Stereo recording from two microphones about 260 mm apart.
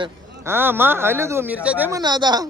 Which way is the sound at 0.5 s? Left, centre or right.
Centre.